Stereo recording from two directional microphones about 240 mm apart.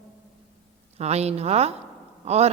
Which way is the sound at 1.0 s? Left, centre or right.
Right.